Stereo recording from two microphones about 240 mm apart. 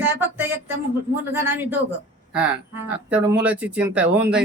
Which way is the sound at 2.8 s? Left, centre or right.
Centre.